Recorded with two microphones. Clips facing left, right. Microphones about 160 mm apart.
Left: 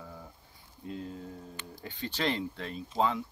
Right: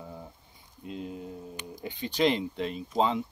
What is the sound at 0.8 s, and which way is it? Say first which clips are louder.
Speech: right 2 dB; 20° right (ahead or behind).